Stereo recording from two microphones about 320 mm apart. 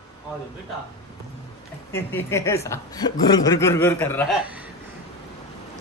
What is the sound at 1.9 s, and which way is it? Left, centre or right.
Speech, centre.